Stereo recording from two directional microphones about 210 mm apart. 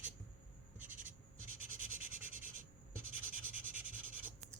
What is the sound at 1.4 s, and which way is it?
Writing, 80° right.